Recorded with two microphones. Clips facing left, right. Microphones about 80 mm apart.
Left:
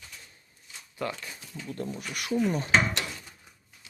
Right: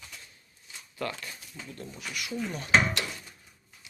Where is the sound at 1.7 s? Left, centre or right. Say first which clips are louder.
Left 5 dB; left.